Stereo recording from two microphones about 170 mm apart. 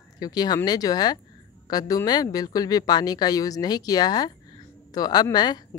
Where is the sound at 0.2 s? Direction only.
25° left (ahead or behind).